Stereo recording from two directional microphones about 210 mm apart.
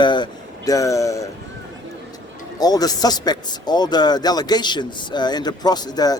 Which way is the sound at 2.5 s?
20° left (ahead or behind).